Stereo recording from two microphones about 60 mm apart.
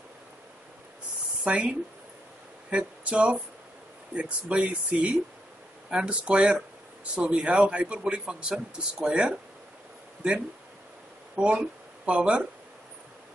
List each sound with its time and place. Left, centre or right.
1.4 s speech: right
2.7 s a sound: right
4.1 s a man's voice: centre
11.3 s speech: centre